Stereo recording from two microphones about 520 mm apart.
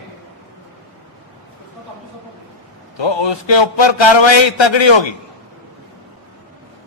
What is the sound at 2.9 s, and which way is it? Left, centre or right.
A man's voice, left.